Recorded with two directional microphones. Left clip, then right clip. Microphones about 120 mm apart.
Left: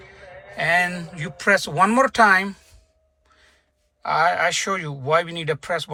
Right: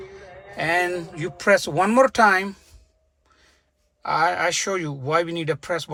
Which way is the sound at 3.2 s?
35° right (ahead or behind).